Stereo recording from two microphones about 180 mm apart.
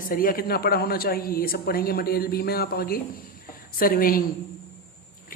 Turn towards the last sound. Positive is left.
turn(degrees=55)  # may be behind; listen again after turning